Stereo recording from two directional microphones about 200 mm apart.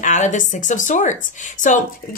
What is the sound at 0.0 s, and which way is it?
A woman's voice, 35° left (ahead or behind).